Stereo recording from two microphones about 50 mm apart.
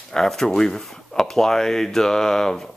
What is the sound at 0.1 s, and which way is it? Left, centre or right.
Speech, centre.